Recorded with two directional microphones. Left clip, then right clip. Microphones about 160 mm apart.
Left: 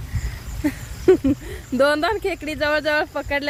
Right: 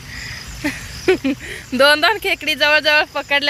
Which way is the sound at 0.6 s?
25° left (ahead or behind).